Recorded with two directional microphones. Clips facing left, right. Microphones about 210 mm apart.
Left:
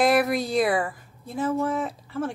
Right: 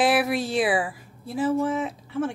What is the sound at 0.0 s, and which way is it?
Speech, 5° right (ahead or behind).